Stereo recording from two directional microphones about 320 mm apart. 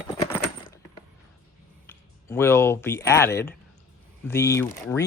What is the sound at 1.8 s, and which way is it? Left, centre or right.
Speech, centre.